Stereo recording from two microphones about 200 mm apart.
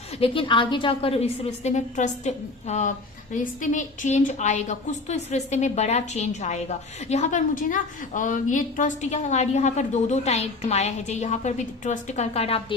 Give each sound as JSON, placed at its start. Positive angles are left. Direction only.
{"t": 0.2, "sound": "a woman's voice", "side_deg": 25}